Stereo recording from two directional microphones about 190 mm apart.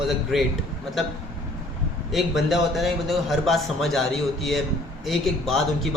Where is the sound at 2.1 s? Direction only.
Centre (ahead or behind).